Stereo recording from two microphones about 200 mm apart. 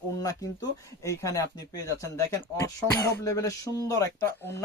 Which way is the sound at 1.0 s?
15° left (ahead or behind).